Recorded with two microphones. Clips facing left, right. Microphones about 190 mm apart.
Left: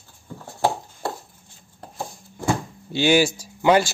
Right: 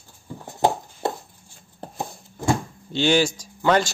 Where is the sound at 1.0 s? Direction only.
20° right (ahead or behind).